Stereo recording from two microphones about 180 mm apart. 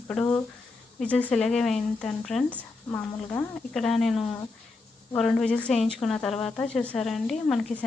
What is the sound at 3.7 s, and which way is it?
Speech, centre (ahead or behind).